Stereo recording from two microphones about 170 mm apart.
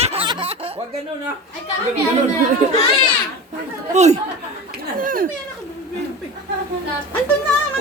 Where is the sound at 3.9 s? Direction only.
40° right (ahead or behind).